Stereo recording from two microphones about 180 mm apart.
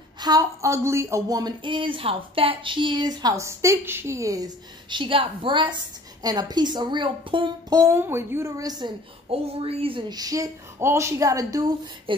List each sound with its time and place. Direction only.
0.2 s speech: 20° right (ahead or behind)